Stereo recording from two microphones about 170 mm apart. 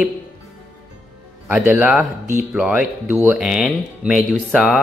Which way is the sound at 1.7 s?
5° right (ahead or behind).